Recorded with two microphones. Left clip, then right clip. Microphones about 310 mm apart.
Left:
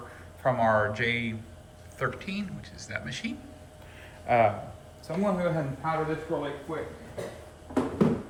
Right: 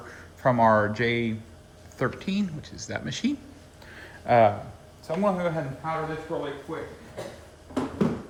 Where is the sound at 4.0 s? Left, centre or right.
Right.